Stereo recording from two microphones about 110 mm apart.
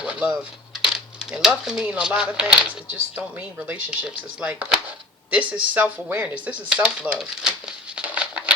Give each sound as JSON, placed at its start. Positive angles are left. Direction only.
{"t": 0.0, "sound": "coin", "side_deg": -10}
{"t": 1.6, "sound": "speech", "side_deg": -5}
{"t": 7.9, "sound": "patter", "side_deg": -10}